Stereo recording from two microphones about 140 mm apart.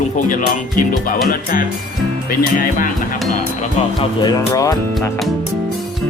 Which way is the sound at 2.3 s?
90° left.